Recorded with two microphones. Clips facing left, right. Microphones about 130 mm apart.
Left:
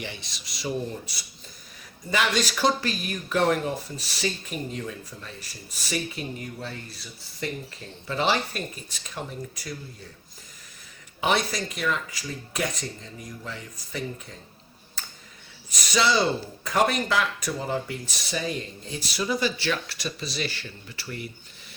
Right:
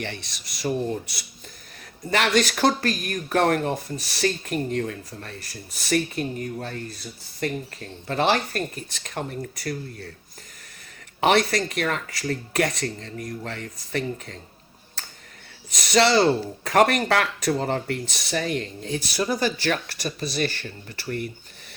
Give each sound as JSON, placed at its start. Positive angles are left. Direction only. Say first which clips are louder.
{"t": 0.0, "sound": "speech", "louder": "right 4 dB", "side_deg": -60}
{"t": 11.2, "sound": "speech", "louder": "right 5 dB", "side_deg": -70}
{"t": 15.9, "sound": "speech", "louder": "right 5 dB", "side_deg": -80}
{"t": 19.1, "sound": "speech", "louder": "right 1 dB", "side_deg": -45}